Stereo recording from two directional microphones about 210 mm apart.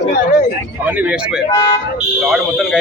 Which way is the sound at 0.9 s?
5° right (ahead or behind).